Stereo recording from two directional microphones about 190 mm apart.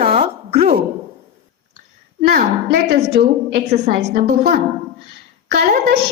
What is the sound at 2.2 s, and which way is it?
A woman's voice, 55° right (ahead or behind).